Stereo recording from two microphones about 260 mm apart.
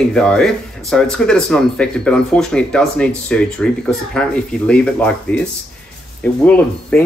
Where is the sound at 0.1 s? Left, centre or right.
Centre.